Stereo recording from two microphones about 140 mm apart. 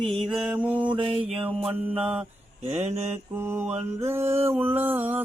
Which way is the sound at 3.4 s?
15° right (ahead or behind).